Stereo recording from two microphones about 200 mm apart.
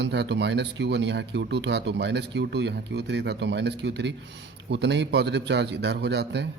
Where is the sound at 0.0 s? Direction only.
60° right (ahead or behind).